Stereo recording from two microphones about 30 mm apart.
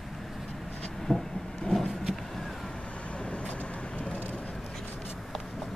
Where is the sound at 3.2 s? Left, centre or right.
Left.